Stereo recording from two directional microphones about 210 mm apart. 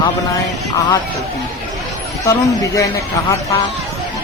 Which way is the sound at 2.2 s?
15° left (ahead or behind).